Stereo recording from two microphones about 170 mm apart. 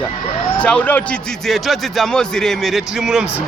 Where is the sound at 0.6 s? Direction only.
10° left (ahead or behind).